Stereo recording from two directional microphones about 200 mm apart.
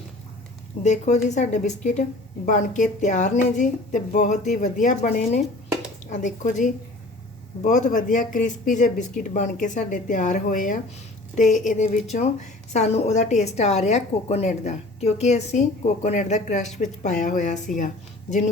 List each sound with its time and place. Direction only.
0.8 s a woman's voice: 35° left (ahead or behind)